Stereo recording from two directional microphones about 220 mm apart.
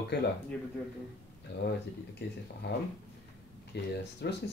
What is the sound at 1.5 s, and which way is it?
Speech, 50° left (ahead or behind).